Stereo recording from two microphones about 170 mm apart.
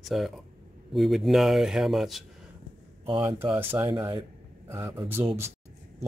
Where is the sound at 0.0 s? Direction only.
Centre (ahead or behind).